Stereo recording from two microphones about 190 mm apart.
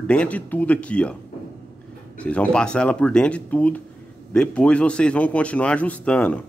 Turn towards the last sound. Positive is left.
turn(degrees=5)  # may be behind; listen again after turning